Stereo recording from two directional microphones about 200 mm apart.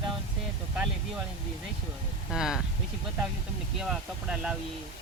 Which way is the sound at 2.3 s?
5° right (ahead or behind).